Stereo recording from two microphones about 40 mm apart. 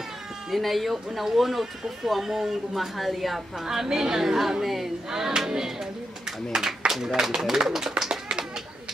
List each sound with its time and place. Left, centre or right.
0.5 s speech: centre
3.6 s a woman's voice: centre
6.9 s a woman's voice: centre
8.0 s tap: centre